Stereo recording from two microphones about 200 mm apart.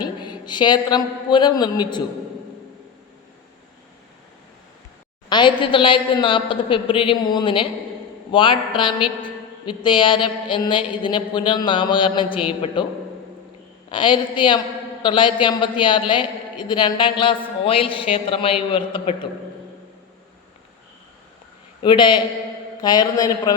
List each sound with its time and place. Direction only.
0.2 s a man's voice: 20° left (ahead or behind)
5.3 s a man's voice: 25° left (ahead or behind)
13.9 s a man's voice: 25° left (ahead or behind)
21.8 s a man's voice: 25° left (ahead or behind)